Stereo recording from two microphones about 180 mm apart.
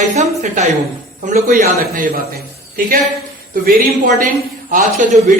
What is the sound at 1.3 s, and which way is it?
Speech, 50° right (ahead or behind).